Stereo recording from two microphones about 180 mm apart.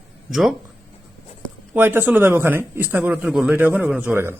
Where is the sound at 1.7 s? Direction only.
10° right (ahead or behind).